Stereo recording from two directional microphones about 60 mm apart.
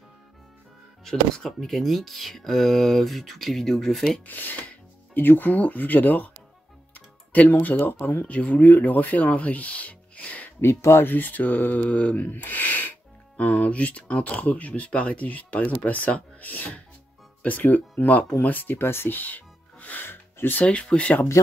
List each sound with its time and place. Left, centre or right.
1.0 s speech: centre
4.3 s speech: left
10.6 s speech: left
20.6 s speech: centre